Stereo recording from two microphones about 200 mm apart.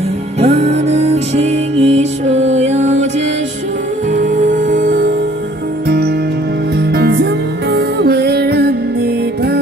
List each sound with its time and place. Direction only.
0.4 s music: 30° right (ahead or behind)
4.1 s music: 40° right (ahead or behind)
5.9 s music: 55° right (ahead or behind)